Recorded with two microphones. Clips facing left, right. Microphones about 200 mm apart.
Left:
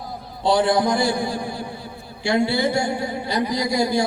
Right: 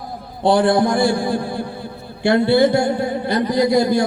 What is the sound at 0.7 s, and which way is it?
Speech, 55° right (ahead or behind).